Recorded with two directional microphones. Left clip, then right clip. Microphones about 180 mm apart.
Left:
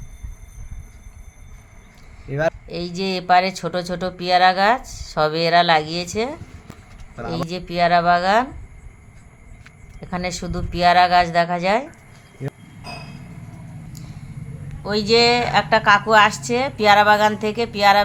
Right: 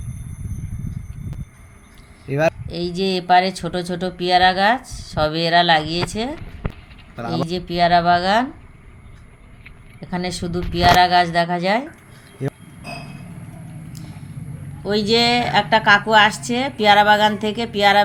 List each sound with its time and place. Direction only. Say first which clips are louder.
2.3 s speech: right 3 dB; 20° right (ahead or behind)
2.6 s speech: right 3 dB; 10° left (ahead or behind)
7.3 s speech: right 2 dB; 5° left (ahead or behind)
10.0 s speech: even; 10° left (ahead or behind)
14.8 s speech: left 1 dB; 10° left (ahead or behind)